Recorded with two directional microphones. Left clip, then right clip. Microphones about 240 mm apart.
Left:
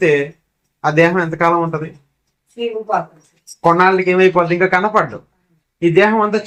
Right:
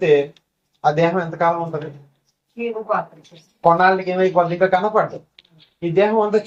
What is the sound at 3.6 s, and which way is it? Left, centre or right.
Speech, left.